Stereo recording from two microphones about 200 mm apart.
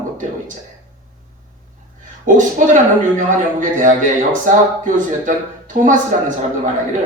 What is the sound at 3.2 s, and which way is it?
Speech, 40° right (ahead or behind).